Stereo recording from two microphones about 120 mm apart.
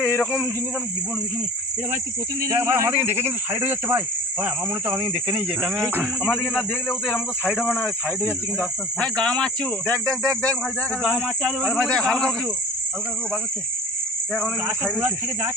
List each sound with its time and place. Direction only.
0.0 s snake: 15° left (ahead or behind)
2.6 s speech: 25° right (ahead or behind)
3.1 s speech: 70° right (ahead or behind)
3.5 s speech: 15° right (ahead or behind)
4.9 s speech: 45° right (ahead or behind)
5.5 s speech: 5° right (ahead or behind)
6.2 s speech: 5° left (ahead or behind)
8.5 s cricket: 5° left (ahead or behind)
9.9 s speech: 25° right (ahead or behind)
11.6 s speech: 5° left (ahead or behind)
14.9 s speech: 20° right (ahead or behind)